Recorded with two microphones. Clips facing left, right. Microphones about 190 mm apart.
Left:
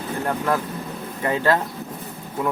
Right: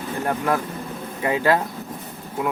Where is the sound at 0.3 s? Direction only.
15° right (ahead or behind).